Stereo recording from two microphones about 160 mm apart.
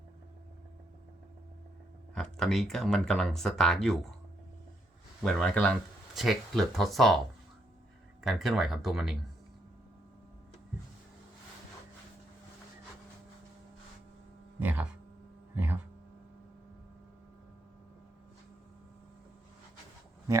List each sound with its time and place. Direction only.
2.1 s speech: centre (ahead or behind)
5.2 s speech: 5° left (ahead or behind)
8.2 s speech: centre (ahead or behind)
14.6 s a sound: 10° right (ahead or behind)